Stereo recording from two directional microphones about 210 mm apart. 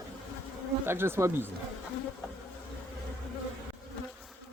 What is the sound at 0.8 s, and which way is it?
Speech, 10° right (ahead or behind).